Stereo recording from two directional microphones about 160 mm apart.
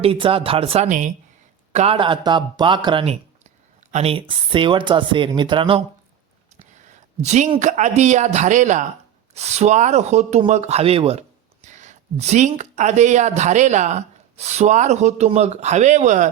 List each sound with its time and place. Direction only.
0.0 s speech: 35° right (ahead or behind)
0.9 s speech: 55° right (ahead or behind)
1.7 s speech: 40° right (ahead or behind)
6.8 s speech: 45° right (ahead or behind)
11.6 s speech: 50° right (ahead or behind)